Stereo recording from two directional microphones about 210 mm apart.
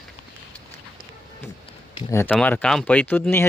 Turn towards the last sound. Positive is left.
turn(degrees=10)  # may be behind; listen again after turning